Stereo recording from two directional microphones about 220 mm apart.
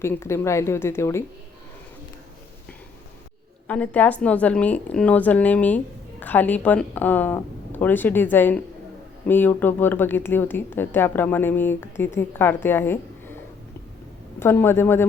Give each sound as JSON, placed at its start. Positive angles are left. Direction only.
{"t": 0.0, "sound": "a woman's voice", "side_deg": 10}
{"t": 3.7, "sound": "a woman's voice", "side_deg": 5}
{"t": 14.3, "sound": "a woman's voice", "side_deg": 10}